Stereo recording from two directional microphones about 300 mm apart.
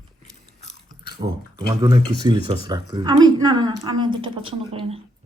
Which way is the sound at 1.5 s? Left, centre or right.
Centre.